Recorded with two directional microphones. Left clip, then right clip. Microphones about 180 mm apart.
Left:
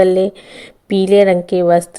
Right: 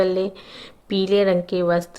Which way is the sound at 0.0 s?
30° left (ahead or behind).